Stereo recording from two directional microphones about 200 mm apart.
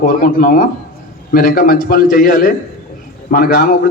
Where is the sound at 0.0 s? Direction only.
45° left (ahead or behind).